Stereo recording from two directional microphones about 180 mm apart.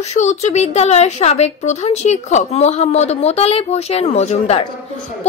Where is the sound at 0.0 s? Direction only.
40° left (ahead or behind).